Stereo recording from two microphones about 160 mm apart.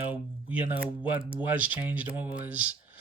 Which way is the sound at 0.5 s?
10° right (ahead or behind).